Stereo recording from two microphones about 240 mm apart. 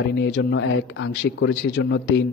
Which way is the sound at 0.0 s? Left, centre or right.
Left.